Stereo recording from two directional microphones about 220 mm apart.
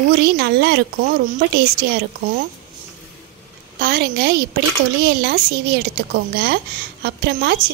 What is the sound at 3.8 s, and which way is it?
A woman's voice, 45° right (ahead or behind).